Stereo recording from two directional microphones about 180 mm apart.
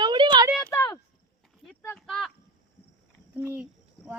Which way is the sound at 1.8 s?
5° left (ahead or behind).